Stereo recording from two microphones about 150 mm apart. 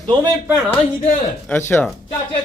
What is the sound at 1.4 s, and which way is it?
Speech, 15° left (ahead or behind).